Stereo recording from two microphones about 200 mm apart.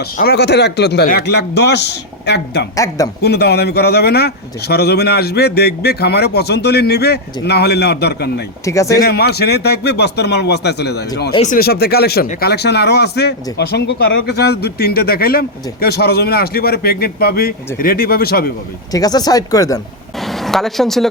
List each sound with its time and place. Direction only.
0.0 s a man's voice: 50° left (ahead or behind)
2.7 s speech: 15° left (ahead or behind)
3.2 s a man's voice: 55° left (ahead or behind)
8.6 s speech: 15° left (ahead or behind)
8.9 s a man's voice: 50° left (ahead or behind)
11.3 s speech: 40° left (ahead or behind)
18.9 s speech: 20° left (ahead or behind)
20.1 s a sound: centre (ahead or behind)